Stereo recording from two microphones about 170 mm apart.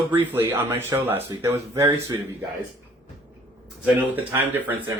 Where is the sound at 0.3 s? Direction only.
10° right (ahead or behind).